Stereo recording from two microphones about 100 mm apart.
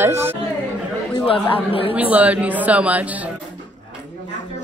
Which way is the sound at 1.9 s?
15° right (ahead or behind).